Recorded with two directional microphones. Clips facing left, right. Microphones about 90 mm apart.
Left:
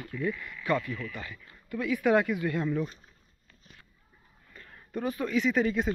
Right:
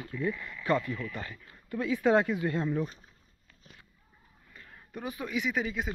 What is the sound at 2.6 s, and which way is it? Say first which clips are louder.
Speech: left 1 dB; 20° right (ahead or behind).